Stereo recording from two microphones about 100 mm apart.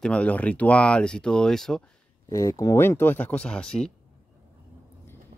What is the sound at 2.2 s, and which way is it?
Speech, 30° left (ahead or behind).